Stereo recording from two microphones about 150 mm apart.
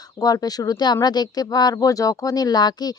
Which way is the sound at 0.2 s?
25° left (ahead or behind).